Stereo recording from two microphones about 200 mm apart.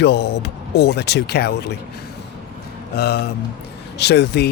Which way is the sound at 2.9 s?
50° left (ahead or behind).